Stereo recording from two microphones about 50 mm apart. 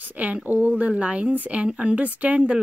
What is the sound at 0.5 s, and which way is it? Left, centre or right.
Speech, right.